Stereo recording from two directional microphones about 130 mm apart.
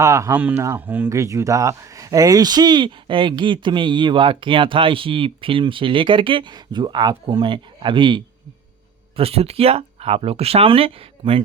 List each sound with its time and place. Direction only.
0.0 s speech: 20° right (ahead or behind); by 8.2 s 40° right (ahead or behind)
9.1 s speech: 50° right (ahead or behind)